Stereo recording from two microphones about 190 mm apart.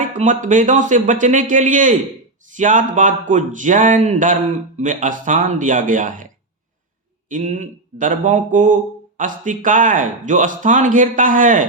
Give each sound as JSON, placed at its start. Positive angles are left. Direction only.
{"t": 0.0, "sound": "speech", "side_deg": -40}
{"t": 7.3, "sound": "speech", "side_deg": -40}